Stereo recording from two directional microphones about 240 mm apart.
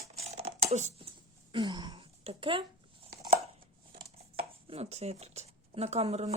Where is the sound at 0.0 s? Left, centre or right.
Right.